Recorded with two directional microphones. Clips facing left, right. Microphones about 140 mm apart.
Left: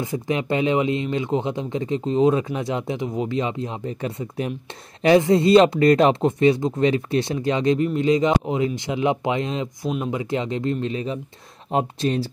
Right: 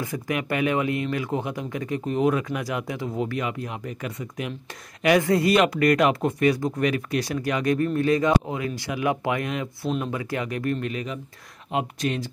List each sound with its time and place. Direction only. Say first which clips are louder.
0.0 s speech: left 3 dB; 25° left (ahead or behind)